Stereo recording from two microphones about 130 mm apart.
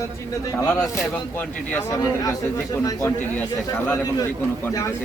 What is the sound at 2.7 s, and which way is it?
Speech, 25° left (ahead or behind).